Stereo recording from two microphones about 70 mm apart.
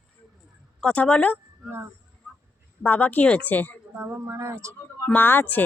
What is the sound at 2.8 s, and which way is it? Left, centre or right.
Speech, left.